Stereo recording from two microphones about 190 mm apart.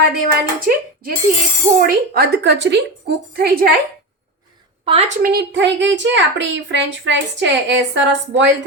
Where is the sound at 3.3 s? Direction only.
55° right (ahead or behind).